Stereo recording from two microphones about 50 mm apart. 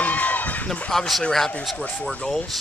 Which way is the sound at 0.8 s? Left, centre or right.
Centre.